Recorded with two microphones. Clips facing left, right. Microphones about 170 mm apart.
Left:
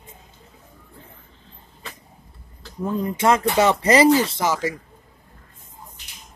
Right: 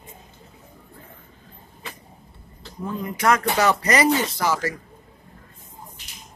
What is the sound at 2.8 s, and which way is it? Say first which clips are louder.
Speech: left 5 dB; 40° left (ahead or behind).